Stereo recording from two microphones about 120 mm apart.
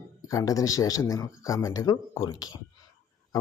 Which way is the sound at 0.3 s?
30° left (ahead or behind).